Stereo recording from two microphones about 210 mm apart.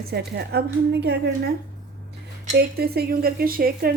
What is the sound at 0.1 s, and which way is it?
A woman's voice, 50° right (ahead or behind).